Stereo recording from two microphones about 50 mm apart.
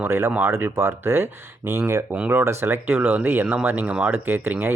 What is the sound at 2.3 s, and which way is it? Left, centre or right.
Speech, right.